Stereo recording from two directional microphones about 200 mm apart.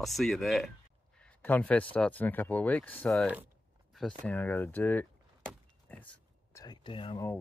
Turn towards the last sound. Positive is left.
turn(degrees=25)  # may be behind; listen again after turning